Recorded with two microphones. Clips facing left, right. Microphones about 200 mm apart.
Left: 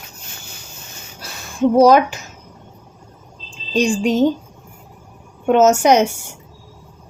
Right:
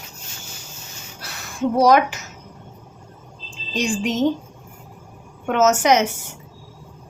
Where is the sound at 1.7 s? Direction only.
30° left (ahead or behind).